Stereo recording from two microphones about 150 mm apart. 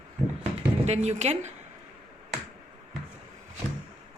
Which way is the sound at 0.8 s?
45° right (ahead or behind).